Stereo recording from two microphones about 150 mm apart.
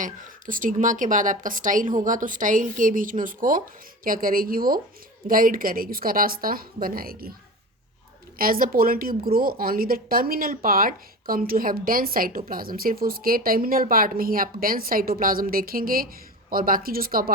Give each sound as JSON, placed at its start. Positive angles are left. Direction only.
{"t": 0.0, "sound": "a woman's voice", "side_deg": -65}
{"t": 8.4, "sound": "a woman's voice", "side_deg": -70}